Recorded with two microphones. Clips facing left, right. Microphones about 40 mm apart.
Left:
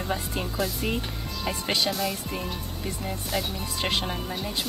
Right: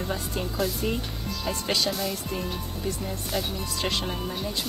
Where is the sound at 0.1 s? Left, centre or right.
Centre.